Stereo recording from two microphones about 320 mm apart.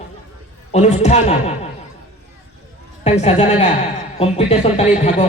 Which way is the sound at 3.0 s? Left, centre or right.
Centre.